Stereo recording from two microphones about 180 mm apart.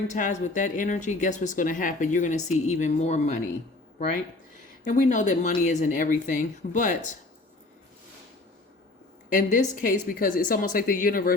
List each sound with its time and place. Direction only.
0.1 s a woman's voice: 45° left (ahead or behind)
4.8 s a woman's voice: 45° left (ahead or behind)
9.3 s a woman's voice: 50° left (ahead or behind)